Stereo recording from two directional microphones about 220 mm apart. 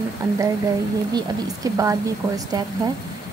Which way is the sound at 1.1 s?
15° right (ahead or behind).